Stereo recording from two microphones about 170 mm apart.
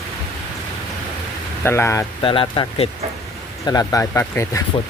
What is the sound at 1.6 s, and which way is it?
Speech, 15° left (ahead or behind).